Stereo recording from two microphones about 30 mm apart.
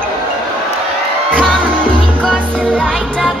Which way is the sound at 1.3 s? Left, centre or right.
Left.